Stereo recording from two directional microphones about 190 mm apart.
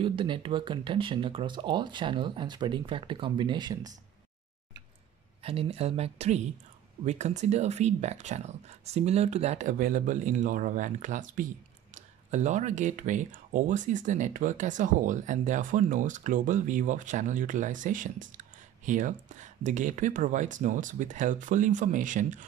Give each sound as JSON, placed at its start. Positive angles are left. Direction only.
{"t": 0.0, "sound": "speech", "side_deg": -25}
{"t": 5.4, "sound": "speech", "side_deg": -30}